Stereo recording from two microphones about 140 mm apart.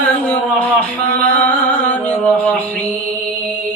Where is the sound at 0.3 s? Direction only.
10° left (ahead or behind).